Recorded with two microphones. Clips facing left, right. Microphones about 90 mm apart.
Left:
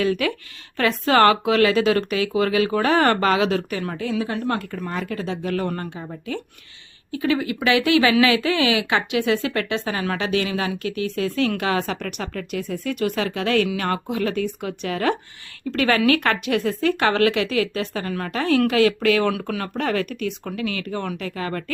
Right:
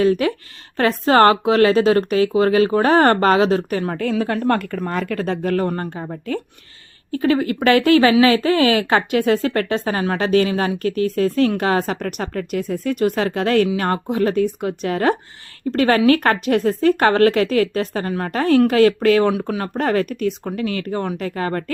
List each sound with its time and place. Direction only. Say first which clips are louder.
0.0 s speech: right 5 dB; 35° right (ahead or behind)